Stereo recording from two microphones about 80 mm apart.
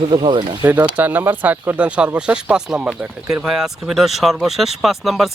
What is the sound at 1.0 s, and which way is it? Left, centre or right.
Speech, right.